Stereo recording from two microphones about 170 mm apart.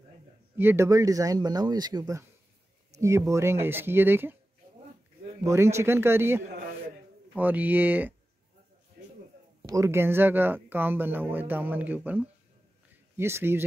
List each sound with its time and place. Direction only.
0.6 s speech: 15° right (ahead or behind)
5.4 s speech: 15° right (ahead or behind)
9.7 s speech: 15° right (ahead or behind)